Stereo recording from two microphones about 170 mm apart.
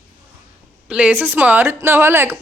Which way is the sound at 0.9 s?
10° right (ahead or behind).